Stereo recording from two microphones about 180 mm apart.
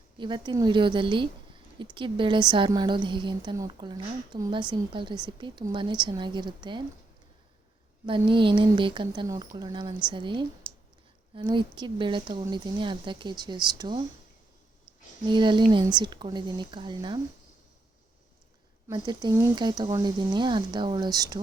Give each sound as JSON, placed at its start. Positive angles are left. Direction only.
{"t": 0.2, "sound": "a woman's voice", "side_deg": -25}
{"t": 8.0, "sound": "a woman's voice", "side_deg": -25}
{"t": 10.6, "sound": "clicking", "side_deg": -50}
{"t": 11.3, "sound": "a woman's voice", "side_deg": -25}
{"t": 18.9, "sound": "a woman's voice", "side_deg": -25}